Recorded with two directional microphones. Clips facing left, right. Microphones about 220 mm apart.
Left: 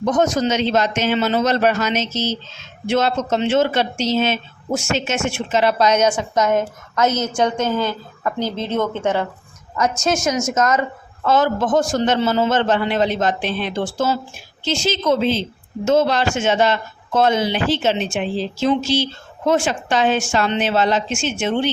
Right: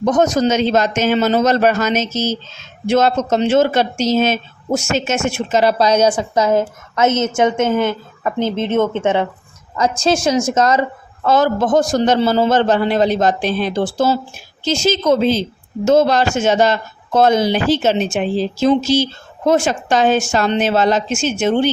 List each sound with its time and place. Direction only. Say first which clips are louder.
0.0 s a man's voice: right 3 dB; 45° right (ahead or behind)